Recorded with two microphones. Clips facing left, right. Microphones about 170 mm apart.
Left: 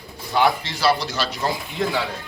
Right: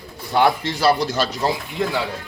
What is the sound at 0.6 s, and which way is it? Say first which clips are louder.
Speech: right 3 dB; 50° right (ahead or behind).